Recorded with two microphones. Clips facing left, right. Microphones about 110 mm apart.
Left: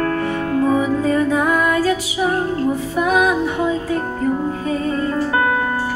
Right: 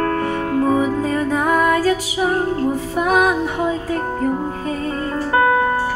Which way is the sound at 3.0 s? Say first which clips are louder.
Even; 45° right (ahead or behind).